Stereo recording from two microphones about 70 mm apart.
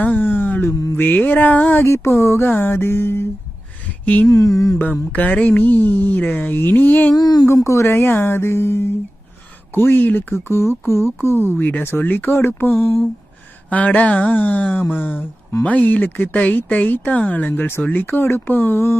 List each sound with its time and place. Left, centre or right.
0.0 s a sound: left
0.9 s speech: left
1.8 s a sound: left
2.4 s speech: left
4.0 s a sound: left
4.3 s mantra: left
4.8 s speech: left
7.1 s speech: left
7.4 s speech: left
11.5 s speech: left
13.7 s speech: left
17.5 s speech: left